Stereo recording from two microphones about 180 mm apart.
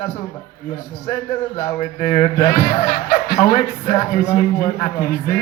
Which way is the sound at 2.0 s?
45° left (ahead or behind).